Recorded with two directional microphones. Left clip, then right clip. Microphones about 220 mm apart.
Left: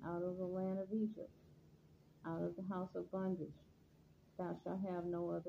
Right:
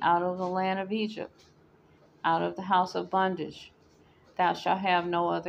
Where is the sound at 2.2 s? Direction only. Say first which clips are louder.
Right 18 dB; 35° right (ahead or behind).